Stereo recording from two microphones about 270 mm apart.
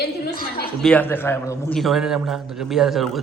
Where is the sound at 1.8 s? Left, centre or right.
Centre.